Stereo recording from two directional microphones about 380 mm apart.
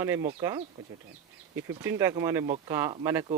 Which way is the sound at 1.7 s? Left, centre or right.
Centre.